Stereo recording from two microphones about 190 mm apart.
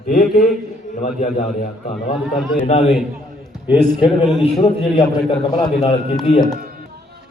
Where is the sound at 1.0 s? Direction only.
35° left (ahead or behind).